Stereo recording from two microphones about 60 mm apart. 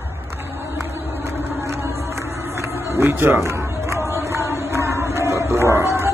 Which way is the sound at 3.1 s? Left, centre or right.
Right.